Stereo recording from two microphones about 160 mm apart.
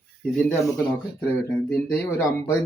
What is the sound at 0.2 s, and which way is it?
Speech, 5° left (ahead or behind).